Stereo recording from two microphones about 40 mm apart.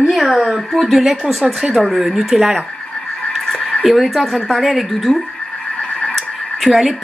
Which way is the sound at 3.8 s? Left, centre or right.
Centre.